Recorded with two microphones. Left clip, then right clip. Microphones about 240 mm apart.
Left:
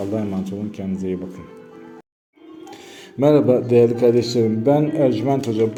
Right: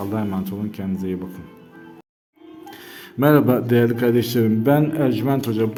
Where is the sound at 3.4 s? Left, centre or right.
Right.